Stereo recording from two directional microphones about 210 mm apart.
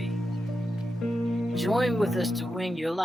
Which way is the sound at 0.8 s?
Centre (ahead or behind).